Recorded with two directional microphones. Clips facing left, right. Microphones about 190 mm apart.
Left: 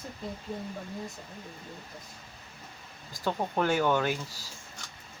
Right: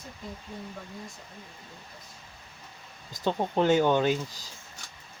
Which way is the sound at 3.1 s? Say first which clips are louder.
Right 3 dB; 20° right (ahead or behind).